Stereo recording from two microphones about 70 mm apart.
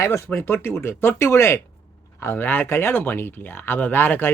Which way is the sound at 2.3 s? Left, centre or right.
Left.